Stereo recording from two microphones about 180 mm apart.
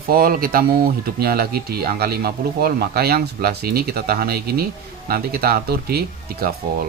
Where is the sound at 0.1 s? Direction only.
55° right (ahead or behind).